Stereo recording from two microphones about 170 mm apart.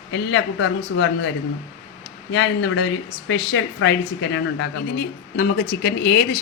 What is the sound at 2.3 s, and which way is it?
A woman's voice, 90° left.